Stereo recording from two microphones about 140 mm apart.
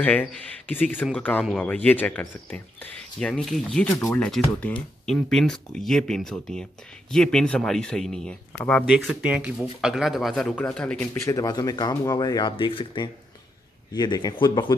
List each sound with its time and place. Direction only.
0.0 s speech: 10° left (ahead or behind)
3.8 s speech: 15° left (ahead or behind)
11.1 s speech: 25° left (ahead or behind)